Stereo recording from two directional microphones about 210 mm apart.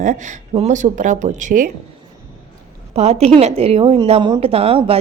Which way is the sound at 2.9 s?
30° right (ahead or behind).